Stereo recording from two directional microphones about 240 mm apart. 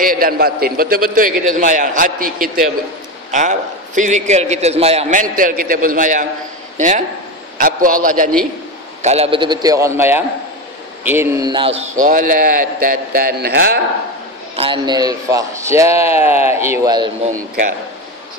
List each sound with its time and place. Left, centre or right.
0.0 s a man's voice: right
5.3 s a man's voice: right
7.5 s a man's voice: right
14.6 s speech: centre